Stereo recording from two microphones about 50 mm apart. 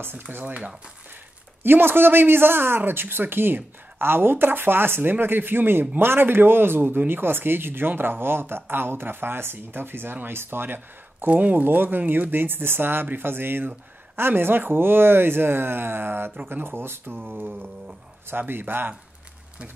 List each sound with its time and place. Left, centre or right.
0.0 s a man's voice: right
1.6 s a man's voice: right
11.2 s a man's voice: right